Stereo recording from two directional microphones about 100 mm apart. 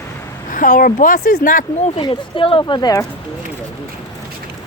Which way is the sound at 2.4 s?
55° left (ahead or behind).